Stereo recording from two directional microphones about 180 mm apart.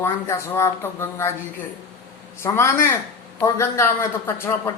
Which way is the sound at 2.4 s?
15° left (ahead or behind).